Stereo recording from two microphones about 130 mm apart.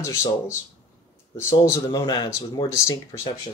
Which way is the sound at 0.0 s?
20° left (ahead or behind).